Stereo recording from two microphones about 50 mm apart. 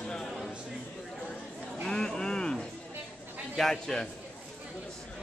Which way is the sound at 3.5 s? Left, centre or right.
Centre.